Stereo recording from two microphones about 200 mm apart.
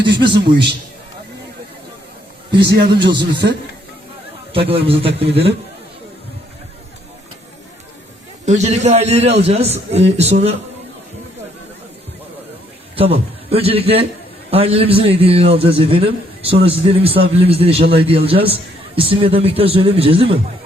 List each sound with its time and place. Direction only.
0.0 s a man's voice: 60° right (ahead or behind)
3.0 s a man's voice: 60° right (ahead or behind)
4.7 s a man's voice: 30° right (ahead or behind)
8.4 s a man's voice: 35° right (ahead or behind)
13.0 s a man's voice: 30° right (ahead or behind)